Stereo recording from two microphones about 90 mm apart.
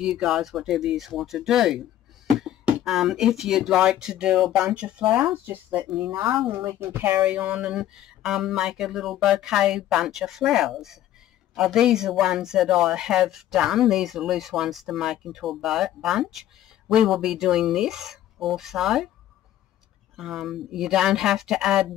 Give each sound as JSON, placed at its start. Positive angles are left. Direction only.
{"t": 0.0, "sound": "a woman's voice", "side_deg": -5}
{"t": 7.2, "sound": "speech", "side_deg": -15}
{"t": 20.2, "sound": "speech", "side_deg": -5}